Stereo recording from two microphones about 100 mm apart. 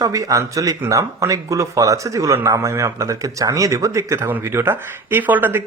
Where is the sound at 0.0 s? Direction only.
35° right (ahead or behind).